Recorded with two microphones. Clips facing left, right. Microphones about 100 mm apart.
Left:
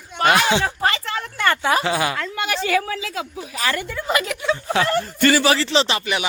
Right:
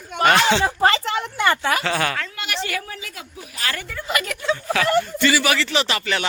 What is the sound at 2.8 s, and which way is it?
Speech, 90° left.